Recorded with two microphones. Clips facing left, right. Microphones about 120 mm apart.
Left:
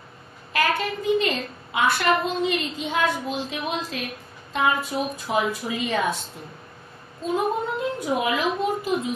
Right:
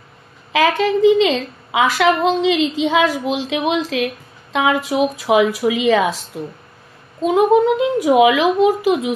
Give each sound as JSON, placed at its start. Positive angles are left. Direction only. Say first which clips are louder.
{"t": 0.5, "sound": "a woman's voice", "louder": "right 8 dB", "side_deg": -90}